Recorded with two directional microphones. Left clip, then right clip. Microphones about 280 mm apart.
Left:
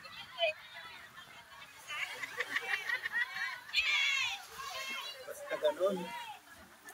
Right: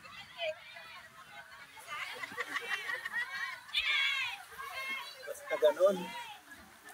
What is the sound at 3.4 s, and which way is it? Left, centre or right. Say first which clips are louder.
Children playing: left 1 dB; left.